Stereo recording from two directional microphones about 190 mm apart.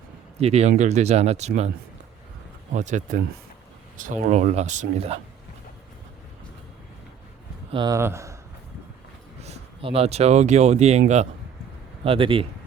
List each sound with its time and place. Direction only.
0.3 s speech: 35° right (ahead or behind)
2.7 s speech: 40° right (ahead or behind)
7.7 s speech: 20° right (ahead or behind)
9.4 s speech: 35° right (ahead or behind)
12.0 s speech: 30° right (ahead or behind)